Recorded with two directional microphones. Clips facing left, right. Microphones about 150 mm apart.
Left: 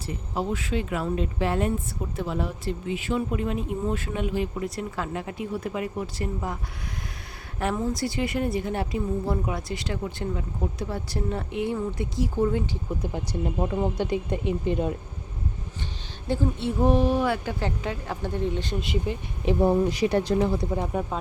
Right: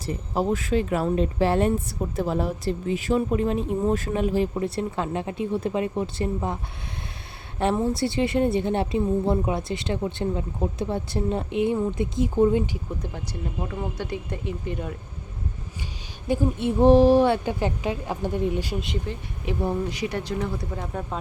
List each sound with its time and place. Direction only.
0.0 s speech: 40° right (ahead or behind); by 6.6 s 25° right (ahead or behind)
7.6 s a woman's voice: 25° right (ahead or behind)
13.7 s speech: 20° left (ahead or behind)
16.2 s speech: 15° right (ahead or behind)
16.8 s speech: 30° right (ahead or behind); by 18.9 s 5° right (ahead or behind)
19.5 s speech: 35° left (ahead or behind)
20.7 s speech: 20° left (ahead or behind)